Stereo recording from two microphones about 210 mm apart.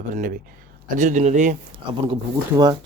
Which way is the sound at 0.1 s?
40° right (ahead or behind).